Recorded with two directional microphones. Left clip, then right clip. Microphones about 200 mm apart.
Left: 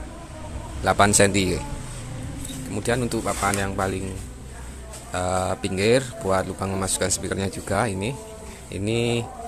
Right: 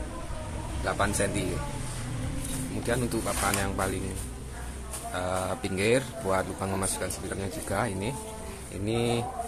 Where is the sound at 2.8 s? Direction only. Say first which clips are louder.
Left 6 dB; 30° left (ahead or behind).